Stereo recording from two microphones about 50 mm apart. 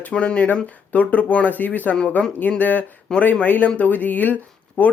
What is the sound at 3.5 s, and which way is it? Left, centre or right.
Speech, left.